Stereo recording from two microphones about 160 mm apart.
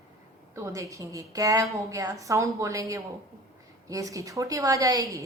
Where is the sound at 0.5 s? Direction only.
20° right (ahead or behind).